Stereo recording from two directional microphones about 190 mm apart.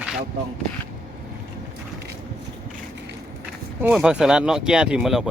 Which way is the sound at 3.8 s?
10° right (ahead or behind).